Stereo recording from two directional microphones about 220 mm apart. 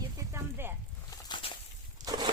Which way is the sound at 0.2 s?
10° right (ahead or behind).